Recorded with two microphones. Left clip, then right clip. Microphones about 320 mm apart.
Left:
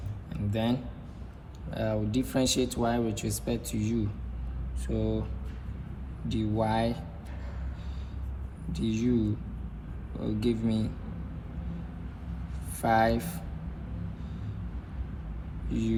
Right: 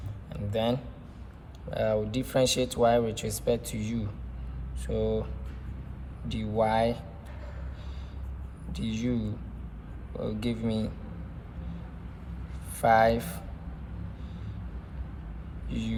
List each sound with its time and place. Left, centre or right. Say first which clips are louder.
0.5 s speech: right 3 dB; right
6.2 s speech: right 3 dB; right
8.7 s speech: left 3 dB; right
12.8 s speech: right 3 dB; right
15.7 s speech: left 4 dB; right